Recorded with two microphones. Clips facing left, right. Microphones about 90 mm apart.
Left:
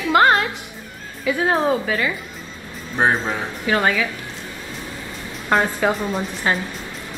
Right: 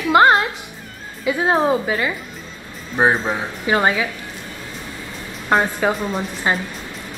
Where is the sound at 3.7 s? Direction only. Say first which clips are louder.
Right 1 dB; 20° right (ahead or behind).